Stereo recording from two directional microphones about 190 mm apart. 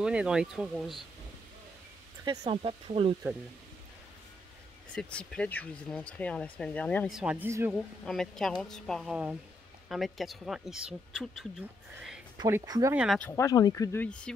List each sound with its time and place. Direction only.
0.0 s speech: 5° right (ahead or behind)
2.4 s speech: 30° right (ahead or behind)
4.9 s speech: 5° left (ahead or behind)
7.2 s speech: 5° right (ahead or behind)
7.7 s speech: centre (ahead or behind)
12.4 s speech: 15° right (ahead or behind)
12.9 s speech: 5° right (ahead or behind)
13.2 s speech: 15° left (ahead or behind)
14.0 s speech: 5° left (ahead or behind)